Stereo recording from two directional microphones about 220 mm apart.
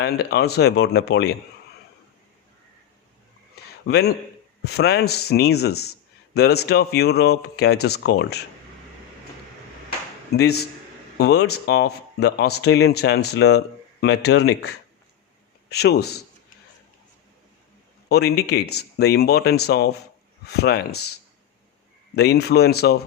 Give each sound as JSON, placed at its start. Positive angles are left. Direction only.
{"t": 0.0, "sound": "speech", "side_deg": 50}
{"t": 3.5, "sound": "a sound", "side_deg": 45}
{"t": 4.6, "sound": "speech", "side_deg": 50}
{"t": 10.3, "sound": "speech", "side_deg": 45}
{"t": 18.1, "sound": "speech", "side_deg": 50}
{"t": 22.1, "sound": "speech", "side_deg": 50}